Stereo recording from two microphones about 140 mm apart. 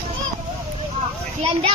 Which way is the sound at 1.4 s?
40° right (ahead or behind).